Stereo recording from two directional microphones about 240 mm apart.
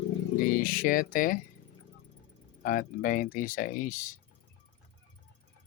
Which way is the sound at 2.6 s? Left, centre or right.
Left.